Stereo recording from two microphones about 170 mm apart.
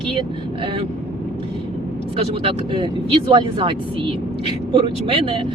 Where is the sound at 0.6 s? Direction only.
30° right (ahead or behind).